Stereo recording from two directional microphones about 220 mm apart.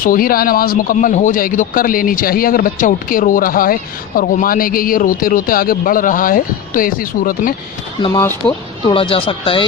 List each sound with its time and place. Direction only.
0.0 s a man's voice: 40° left (ahead or behind)
8.0 s speech: 15° left (ahead or behind)